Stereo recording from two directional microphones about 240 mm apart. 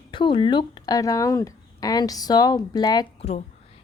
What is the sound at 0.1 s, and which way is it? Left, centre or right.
Speech, left.